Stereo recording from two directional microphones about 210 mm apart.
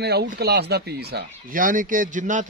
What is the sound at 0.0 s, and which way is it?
A man's voice, 50° right (ahead or behind).